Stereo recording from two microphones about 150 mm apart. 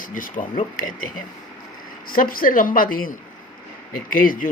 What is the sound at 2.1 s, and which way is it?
A woman's voice, 70° left (ahead or behind).